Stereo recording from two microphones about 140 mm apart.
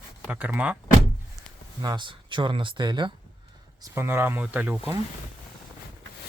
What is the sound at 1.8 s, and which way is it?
Speech, 30° right (ahead or behind).